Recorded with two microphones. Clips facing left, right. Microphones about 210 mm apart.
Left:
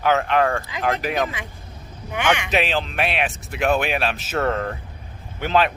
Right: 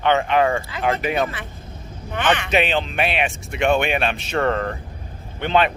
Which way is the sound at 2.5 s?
Centre (ahead or behind).